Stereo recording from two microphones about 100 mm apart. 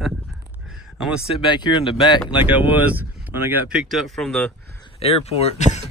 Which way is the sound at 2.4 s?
20° right (ahead or behind).